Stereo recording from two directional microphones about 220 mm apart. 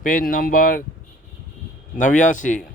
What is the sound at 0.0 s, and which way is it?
Speech, 40° left (ahead or behind).